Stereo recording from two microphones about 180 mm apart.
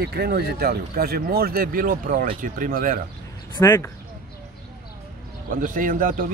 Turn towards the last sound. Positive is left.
turn(degrees=-50)  # may be behind; listen again after turning